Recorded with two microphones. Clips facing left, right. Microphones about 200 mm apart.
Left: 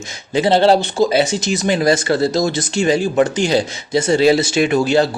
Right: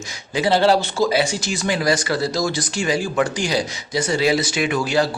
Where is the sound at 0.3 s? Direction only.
25° left (ahead or behind).